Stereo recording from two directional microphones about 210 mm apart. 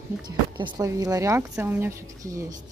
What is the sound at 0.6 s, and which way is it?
A woman's voice, 20° right (ahead or behind).